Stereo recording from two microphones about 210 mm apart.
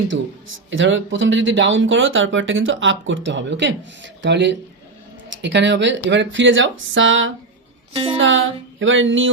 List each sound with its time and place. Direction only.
0.7 s speech: 65° right (ahead or behind)
7.9 s a woman's voice: 25° right (ahead or behind)
8.2 s speech: 65° right (ahead or behind)